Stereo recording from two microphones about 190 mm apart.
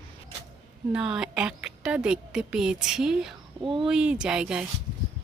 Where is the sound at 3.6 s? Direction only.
25° right (ahead or behind).